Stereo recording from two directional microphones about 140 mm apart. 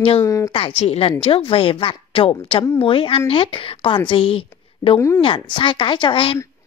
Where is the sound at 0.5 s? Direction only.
40° left (ahead or behind).